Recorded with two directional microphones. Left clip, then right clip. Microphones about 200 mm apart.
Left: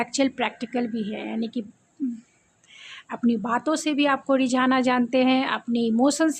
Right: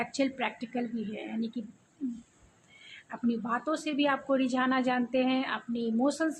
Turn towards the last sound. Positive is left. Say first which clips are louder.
# left 8 dB
turn(degrees=50)  # may be behind; listen again after turning